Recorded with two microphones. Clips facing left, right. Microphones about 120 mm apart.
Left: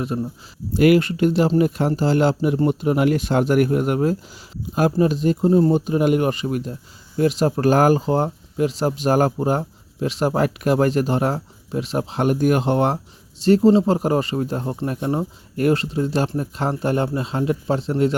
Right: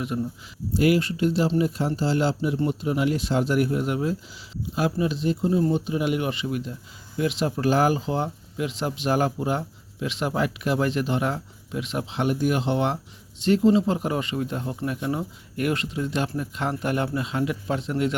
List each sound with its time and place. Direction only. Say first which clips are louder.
0.1 s speech: even; 40° left (ahead or behind)
0.7 s speech: left 6 dB; 60° left (ahead or behind); by 18.1 s 35° left (ahead or behind)